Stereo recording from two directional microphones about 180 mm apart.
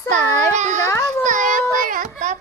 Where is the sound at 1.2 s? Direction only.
45° right (ahead or behind).